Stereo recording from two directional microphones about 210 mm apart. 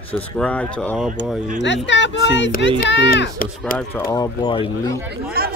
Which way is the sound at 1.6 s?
60° left (ahead or behind).